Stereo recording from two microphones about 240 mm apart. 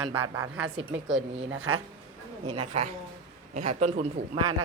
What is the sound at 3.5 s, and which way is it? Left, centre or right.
A woman's voice, right.